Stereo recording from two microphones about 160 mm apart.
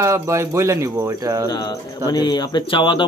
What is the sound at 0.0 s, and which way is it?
Speech, 15° right (ahead or behind).